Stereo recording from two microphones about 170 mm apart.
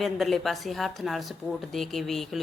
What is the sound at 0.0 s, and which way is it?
Speech, centre (ahead or behind).